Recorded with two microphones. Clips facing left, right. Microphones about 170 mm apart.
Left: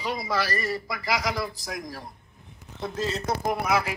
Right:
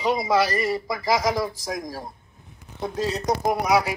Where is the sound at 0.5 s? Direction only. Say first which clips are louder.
Right 5 dB; 20° right (ahead or behind).